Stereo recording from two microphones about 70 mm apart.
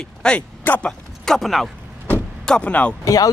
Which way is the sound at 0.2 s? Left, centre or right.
Centre.